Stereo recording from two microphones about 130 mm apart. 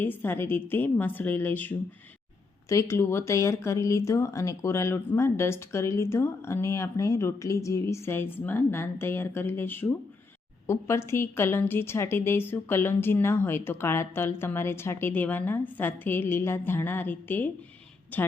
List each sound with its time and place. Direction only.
0.0 s a woman's voice: 15° left (ahead or behind)